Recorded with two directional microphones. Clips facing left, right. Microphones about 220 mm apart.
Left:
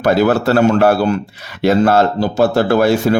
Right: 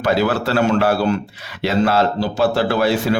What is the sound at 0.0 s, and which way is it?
Speech, 45° left (ahead or behind).